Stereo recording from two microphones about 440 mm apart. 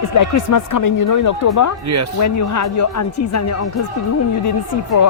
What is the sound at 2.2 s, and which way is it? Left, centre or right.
Speech, left.